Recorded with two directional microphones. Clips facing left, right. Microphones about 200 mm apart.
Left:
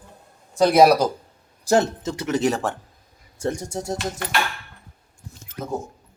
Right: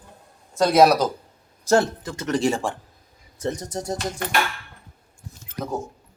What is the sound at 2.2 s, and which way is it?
Speech, 5° left (ahead or behind).